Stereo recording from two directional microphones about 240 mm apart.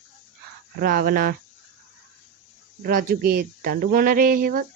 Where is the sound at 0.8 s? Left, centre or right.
Right.